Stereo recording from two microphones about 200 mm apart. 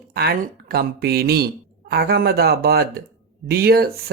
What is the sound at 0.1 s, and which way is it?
Speech, 50° right (ahead or behind).